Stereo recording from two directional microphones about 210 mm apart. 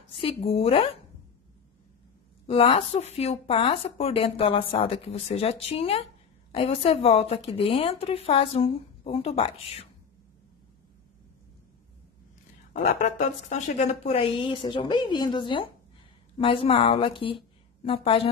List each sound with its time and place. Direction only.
0.2 s a woman's voice: 25° left (ahead or behind)
2.4 s a woman's voice: 25° left (ahead or behind)
13.0 s a woman's voice: 35° left (ahead or behind)